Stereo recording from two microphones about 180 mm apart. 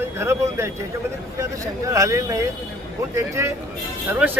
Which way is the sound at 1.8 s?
15° right (ahead or behind).